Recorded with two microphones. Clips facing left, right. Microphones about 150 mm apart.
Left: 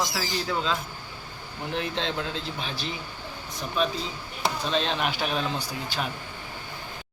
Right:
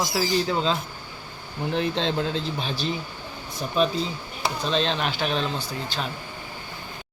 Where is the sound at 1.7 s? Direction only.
30° right (ahead or behind).